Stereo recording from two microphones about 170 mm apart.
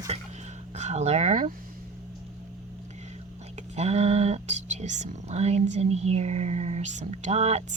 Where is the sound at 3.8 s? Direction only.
40° right (ahead or behind).